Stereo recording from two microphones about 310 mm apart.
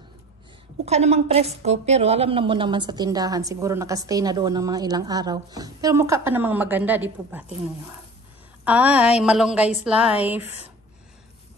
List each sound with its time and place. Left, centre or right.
0.8 s a woman's voice: right
8.6 s a woman's voice: centre
10.4 s speech: centre